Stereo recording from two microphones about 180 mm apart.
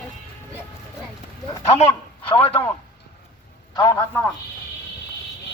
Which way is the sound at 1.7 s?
35° left (ahead or behind).